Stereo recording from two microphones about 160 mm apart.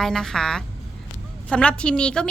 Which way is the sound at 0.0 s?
5° left (ahead or behind).